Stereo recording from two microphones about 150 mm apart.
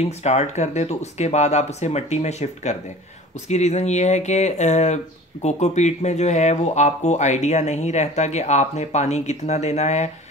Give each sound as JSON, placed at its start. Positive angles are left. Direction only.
{"t": 0.0, "sound": "speech", "side_deg": 45}